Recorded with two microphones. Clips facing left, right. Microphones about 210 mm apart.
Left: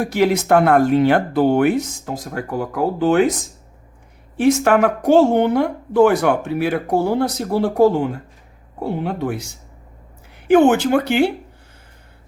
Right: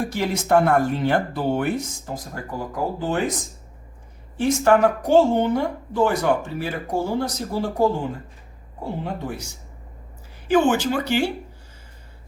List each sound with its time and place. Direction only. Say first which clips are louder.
0.0 s speech: left 8 dB; 70° left (ahead or behind)
4.4 s speech: left 3 dB; 70° left (ahead or behind)
10.5 s speech: left 6 dB; 60° left (ahead or behind)